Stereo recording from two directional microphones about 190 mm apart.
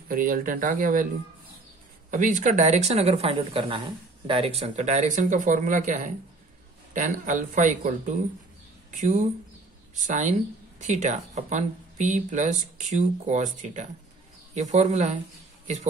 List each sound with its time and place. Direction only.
0.1 s speech: 50° right (ahead or behind)
2.0 s speech: 45° right (ahead or behind)
9.9 s speech: 40° right (ahead or behind)